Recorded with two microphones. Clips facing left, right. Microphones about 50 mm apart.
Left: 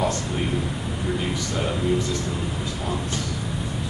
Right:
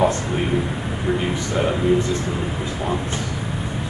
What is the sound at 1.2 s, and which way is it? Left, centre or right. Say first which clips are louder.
Speech: right 5 dB; right.